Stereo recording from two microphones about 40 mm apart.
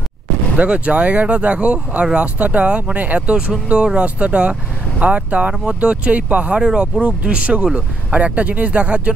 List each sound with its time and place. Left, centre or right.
0.6 s speech: right
6.6 s speech: right